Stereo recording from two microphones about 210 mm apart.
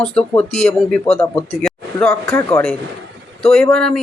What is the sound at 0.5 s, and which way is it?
Speech, 30° left (ahead or behind).